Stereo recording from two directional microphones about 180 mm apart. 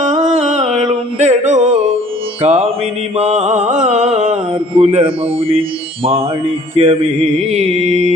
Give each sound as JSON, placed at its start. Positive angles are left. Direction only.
{"t": 0.0, "sound": "music", "side_deg": -40}
{"t": 2.4, "sound": "mantra", "side_deg": -35}